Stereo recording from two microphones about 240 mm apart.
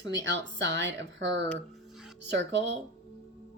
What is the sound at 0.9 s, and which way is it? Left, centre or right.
Speech, right.